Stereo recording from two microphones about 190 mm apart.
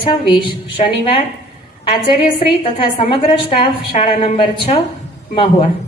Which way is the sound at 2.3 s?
30° left (ahead or behind).